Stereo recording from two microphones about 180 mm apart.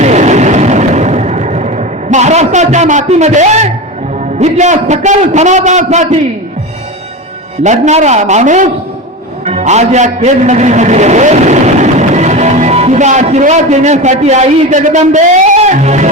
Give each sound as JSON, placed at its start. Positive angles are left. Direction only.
{"t": 0.0, "sound": "vehicle", "side_deg": -40}
{"t": 4.4, "sound": "a man's voice", "side_deg": -40}
{"t": 7.6, "sound": "a man's voice", "side_deg": -40}